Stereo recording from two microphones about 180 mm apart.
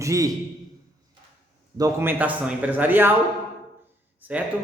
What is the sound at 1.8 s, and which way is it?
A man's voice, 15° right (ahead or behind).